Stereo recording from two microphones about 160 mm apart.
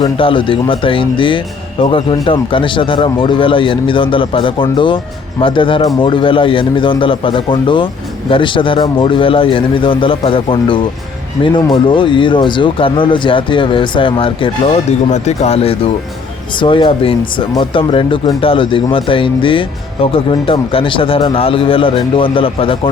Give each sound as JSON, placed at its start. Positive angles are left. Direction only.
{"t": 0.0, "sound": "speech", "side_deg": 35}